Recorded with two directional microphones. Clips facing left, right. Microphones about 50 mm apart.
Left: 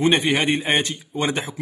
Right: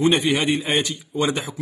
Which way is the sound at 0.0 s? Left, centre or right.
Left.